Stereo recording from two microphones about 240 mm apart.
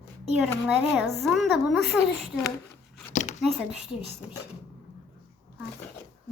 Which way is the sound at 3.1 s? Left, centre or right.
Left.